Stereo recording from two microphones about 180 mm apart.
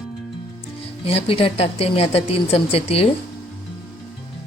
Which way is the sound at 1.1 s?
35° left (ahead or behind).